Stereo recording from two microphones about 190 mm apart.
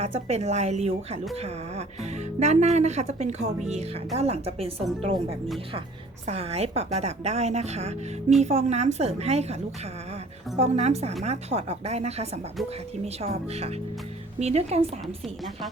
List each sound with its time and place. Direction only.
0.0 s speech: 35° right (ahead or behind)
2.4 s speech: 35° right (ahead or behind)
10.6 s speech: 35° right (ahead or behind)